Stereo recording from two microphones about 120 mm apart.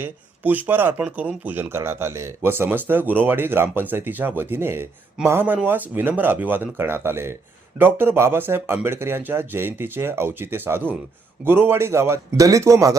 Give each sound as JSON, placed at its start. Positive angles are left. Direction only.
{"t": 0.0, "sound": "speech", "side_deg": -15}